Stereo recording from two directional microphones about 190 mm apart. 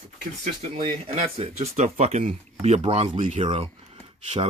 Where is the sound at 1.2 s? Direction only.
35° right (ahead or behind).